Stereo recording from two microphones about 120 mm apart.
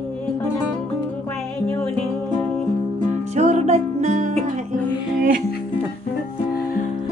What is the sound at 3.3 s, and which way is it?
Music, 65° right (ahead or behind).